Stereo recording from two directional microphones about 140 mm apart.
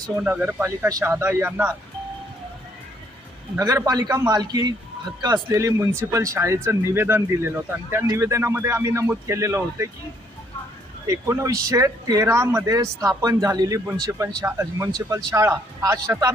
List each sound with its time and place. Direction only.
0.2 s speech: 10° right (ahead or behind)
3.6 s speech: 30° right (ahead or behind)
11.0 s speech: 20° right (ahead or behind)